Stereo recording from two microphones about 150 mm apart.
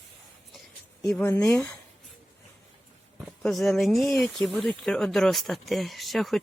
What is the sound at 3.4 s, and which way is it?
Speech, 5° left (ahead or behind).